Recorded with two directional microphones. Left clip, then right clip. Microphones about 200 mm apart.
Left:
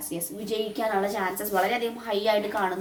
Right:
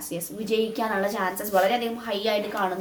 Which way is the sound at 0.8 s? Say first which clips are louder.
Even; 20° right (ahead or behind).